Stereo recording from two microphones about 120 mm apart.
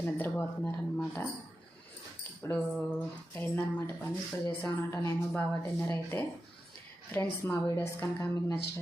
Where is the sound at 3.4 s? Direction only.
15° left (ahead or behind).